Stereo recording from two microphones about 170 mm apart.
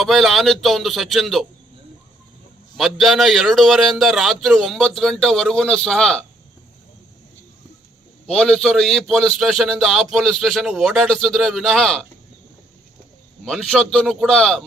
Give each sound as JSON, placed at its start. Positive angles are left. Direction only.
{"t": 0.0, "sound": "a man's voice", "side_deg": 0}
{"t": 2.7, "sound": "a man's voice", "side_deg": 0}
{"t": 8.3, "sound": "a man's voice", "side_deg": 5}
{"t": 13.4, "sound": "a man's voice", "side_deg": 5}